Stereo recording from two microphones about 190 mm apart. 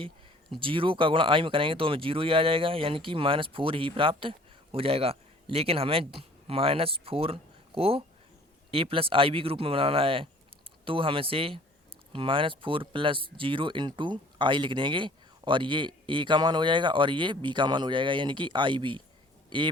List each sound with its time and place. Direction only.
0.6 s speech: 30° right (ahead or behind)